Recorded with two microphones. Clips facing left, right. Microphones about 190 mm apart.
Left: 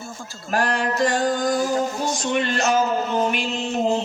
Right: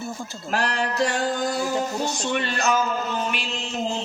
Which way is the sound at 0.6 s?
50° left (ahead or behind).